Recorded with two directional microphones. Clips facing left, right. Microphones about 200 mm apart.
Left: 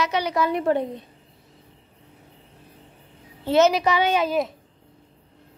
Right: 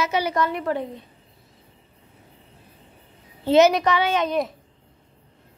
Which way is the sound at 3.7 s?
10° left (ahead or behind).